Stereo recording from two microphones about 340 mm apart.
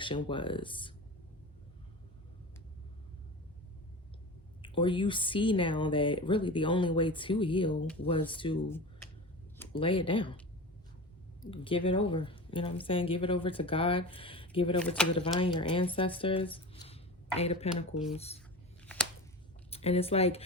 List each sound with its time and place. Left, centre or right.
0.3 s speech: centre
4.6 s speech: centre
9.6 s speech: centre
11.5 s speech: centre
19.7 s speech: centre